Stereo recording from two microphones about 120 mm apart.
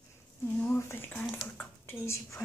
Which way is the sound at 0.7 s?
20° left (ahead or behind).